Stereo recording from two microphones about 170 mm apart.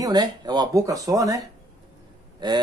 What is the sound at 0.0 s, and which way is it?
Speech, 25° right (ahead or behind).